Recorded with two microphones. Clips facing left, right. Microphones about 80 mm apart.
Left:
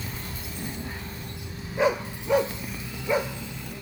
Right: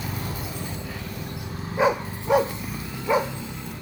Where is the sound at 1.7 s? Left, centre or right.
Right.